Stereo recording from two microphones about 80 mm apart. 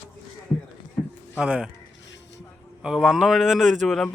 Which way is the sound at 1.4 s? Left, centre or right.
Centre.